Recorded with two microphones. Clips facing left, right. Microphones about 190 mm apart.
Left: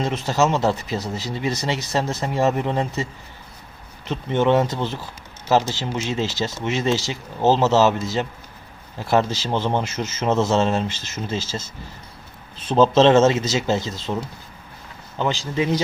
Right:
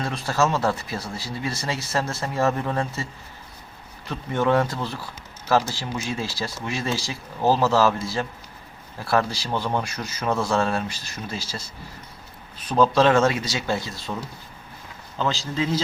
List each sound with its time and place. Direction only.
0.0 s speech: 20° left (ahead or behind)
15.2 s speech: 15° left (ahead or behind)